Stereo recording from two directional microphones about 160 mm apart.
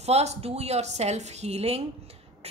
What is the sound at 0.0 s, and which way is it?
A woman's voice, 40° right (ahead or behind).